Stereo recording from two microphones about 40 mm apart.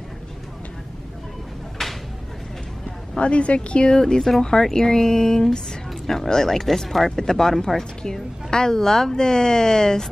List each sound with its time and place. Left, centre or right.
1.8 s a sound: centre
3.2 s a woman's voice: left
4.0 s a woman's voice: centre